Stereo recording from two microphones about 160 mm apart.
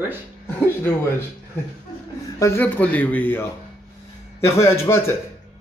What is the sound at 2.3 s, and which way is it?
Speech, 15° left (ahead or behind).